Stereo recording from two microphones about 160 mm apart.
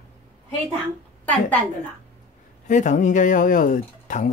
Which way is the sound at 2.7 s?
50° left (ahead or behind).